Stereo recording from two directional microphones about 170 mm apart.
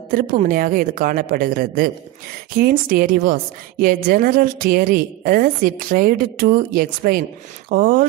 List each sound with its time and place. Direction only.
0.1 s a woman's voice: 50° right (ahead or behind)